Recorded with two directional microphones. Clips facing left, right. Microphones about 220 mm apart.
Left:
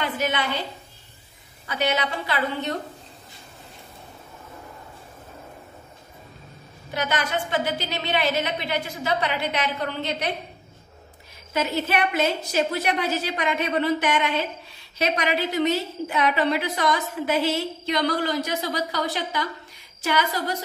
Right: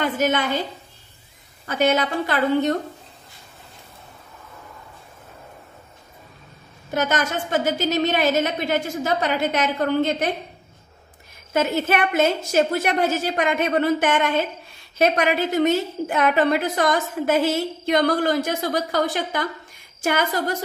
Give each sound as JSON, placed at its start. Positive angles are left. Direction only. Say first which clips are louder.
{"t": 0.0, "sound": "a woman's voice", "louder": "right 5 dB", "side_deg": -45}
{"t": 1.7, "sound": "a woman's voice", "louder": "right 5 dB", "side_deg": -50}
{"t": 6.9, "sound": "a woman's voice", "louder": "right 4 dB", "side_deg": -45}
{"t": 11.5, "sound": "a woman's voice", "louder": "right 4 dB", "side_deg": -50}